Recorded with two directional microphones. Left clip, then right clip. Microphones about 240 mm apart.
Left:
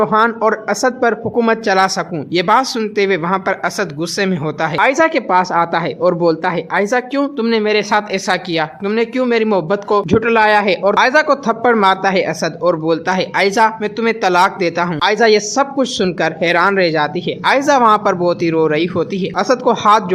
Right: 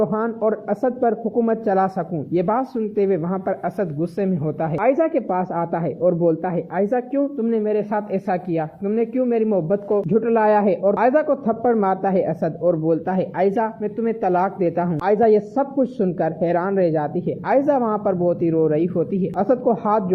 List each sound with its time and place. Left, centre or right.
0.0 s a man's voice: centre
17.7 s a man's voice: centre
19.4 s speech: centre